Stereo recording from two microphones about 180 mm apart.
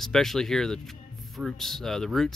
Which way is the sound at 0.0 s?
Centre (ahead or behind).